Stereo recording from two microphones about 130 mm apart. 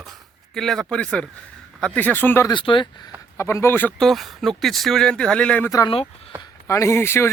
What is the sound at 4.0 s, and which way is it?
Speech, centre (ahead or behind).